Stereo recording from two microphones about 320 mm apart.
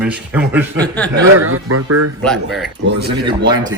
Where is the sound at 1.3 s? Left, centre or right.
Right.